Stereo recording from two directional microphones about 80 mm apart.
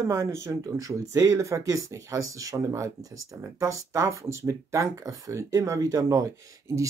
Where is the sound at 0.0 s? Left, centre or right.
Right.